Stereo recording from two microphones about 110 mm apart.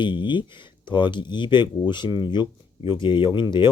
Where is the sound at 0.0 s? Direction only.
45° left (ahead or behind).